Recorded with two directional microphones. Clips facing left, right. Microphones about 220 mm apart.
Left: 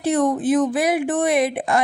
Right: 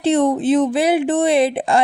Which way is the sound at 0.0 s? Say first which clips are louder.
Right 3 dB; 25° right (ahead or behind).